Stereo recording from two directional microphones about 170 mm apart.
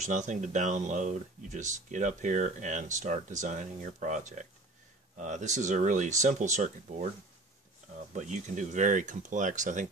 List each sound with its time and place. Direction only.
0.0 s speech: 45° right (ahead or behind)
8.1 s speech: 45° right (ahead or behind)